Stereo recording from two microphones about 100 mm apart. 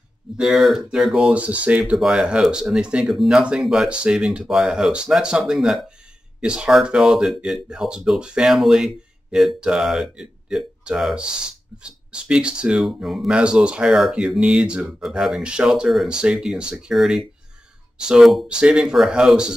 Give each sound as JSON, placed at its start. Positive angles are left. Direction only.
{"t": 0.4, "sound": "speech", "side_deg": 0}